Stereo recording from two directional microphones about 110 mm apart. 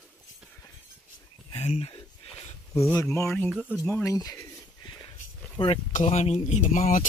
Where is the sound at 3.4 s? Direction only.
10° right (ahead or behind).